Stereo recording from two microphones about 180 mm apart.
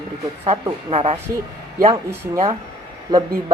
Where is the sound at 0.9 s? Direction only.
35° right (ahead or behind).